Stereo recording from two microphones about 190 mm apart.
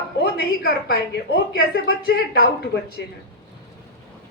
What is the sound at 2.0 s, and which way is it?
Speech, 55° left (ahead or behind).